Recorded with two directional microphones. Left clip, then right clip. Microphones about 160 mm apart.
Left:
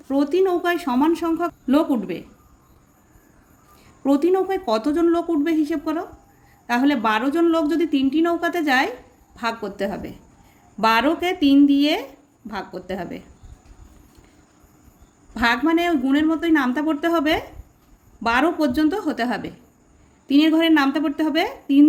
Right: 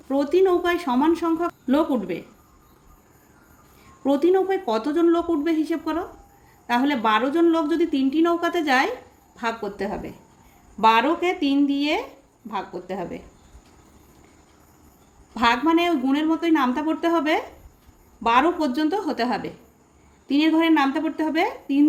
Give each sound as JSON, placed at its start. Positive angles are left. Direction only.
{"t": 0.1, "sound": "a woman's voice", "side_deg": 20}
{"t": 4.0, "sound": "a woman's voice", "side_deg": 25}
{"t": 15.4, "sound": "a woman's voice", "side_deg": 25}